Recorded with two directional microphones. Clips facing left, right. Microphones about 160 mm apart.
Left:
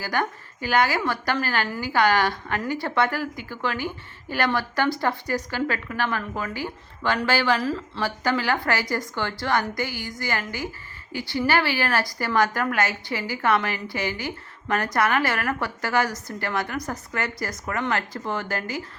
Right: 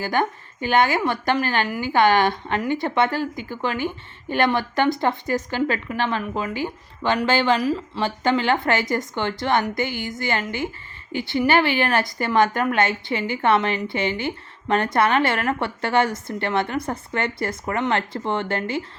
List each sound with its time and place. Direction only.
0.0 s a woman's voice: 20° right (ahead or behind)